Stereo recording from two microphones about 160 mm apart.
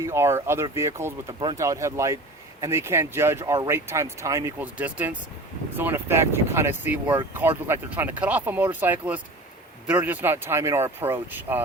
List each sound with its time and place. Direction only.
0.0 s speech: 15° right (ahead or behind)